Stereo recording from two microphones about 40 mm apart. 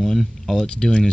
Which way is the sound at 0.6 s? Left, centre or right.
Centre.